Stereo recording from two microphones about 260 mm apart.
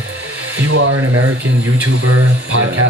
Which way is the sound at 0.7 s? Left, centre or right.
Right.